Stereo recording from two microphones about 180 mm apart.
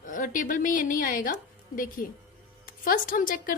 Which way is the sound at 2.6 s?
50° left (ahead or behind).